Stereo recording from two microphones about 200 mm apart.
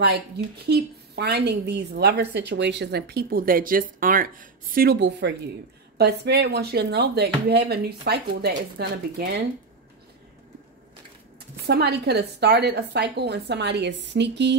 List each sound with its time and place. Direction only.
0.7 s a woman's voice: 55° right (ahead or behind)
11.3 s a woman's voice: 55° right (ahead or behind)